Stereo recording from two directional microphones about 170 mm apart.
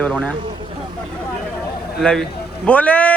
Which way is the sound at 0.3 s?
30° right (ahead or behind).